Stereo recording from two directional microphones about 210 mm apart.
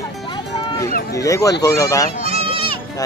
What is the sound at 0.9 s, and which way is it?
Speech, 45° left (ahead or behind).